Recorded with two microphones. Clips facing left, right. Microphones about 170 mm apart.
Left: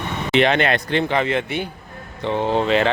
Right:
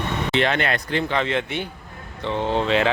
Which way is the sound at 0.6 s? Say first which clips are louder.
Left 4 dB; 75° left (ahead or behind).